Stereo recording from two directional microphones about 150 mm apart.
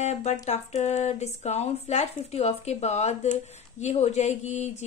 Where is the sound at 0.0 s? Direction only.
50° left (ahead or behind).